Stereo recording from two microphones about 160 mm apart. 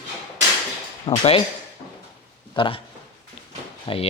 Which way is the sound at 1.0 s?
35° left (ahead or behind).